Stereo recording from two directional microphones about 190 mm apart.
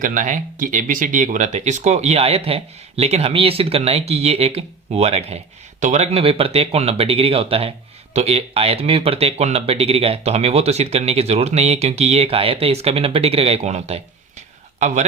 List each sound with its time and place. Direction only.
0.0 s speech: 45° right (ahead or behind)